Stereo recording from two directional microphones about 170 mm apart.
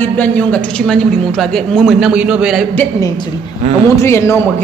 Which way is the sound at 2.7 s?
20° left (ahead or behind).